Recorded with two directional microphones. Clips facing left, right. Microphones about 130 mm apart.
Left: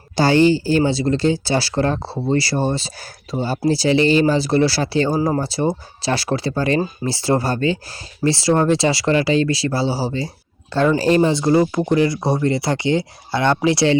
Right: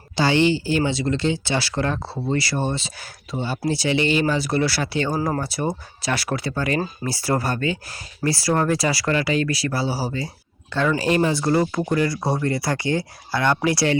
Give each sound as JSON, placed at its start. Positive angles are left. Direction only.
{"t": 0.2, "sound": "speech", "side_deg": 40}